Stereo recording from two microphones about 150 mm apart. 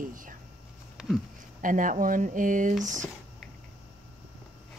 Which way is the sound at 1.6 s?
65° right (ahead or behind).